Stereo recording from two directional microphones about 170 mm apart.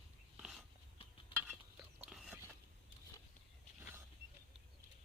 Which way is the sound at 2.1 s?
Centre (ahead or behind).